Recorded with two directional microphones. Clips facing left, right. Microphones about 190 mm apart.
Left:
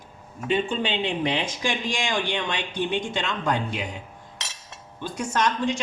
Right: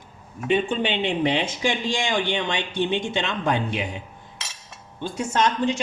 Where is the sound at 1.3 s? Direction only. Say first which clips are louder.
Right 3 dB; 25° right (ahead or behind).